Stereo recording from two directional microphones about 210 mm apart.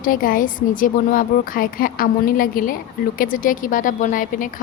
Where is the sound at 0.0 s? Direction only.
40° left (ahead or behind).